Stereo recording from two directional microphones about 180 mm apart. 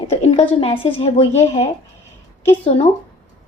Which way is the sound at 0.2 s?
35° left (ahead or behind).